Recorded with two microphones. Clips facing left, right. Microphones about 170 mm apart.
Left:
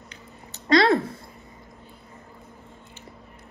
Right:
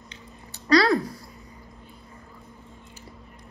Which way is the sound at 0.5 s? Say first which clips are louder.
Left 1 dB; 25° left (ahead or behind).